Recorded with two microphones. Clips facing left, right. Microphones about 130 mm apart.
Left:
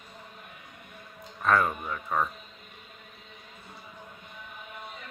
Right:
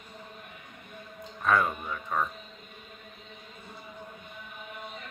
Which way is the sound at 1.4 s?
Centre (ahead or behind).